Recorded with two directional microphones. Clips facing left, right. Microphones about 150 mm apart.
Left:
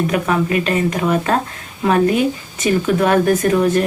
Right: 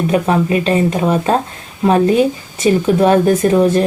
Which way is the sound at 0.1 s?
30° right (ahead or behind).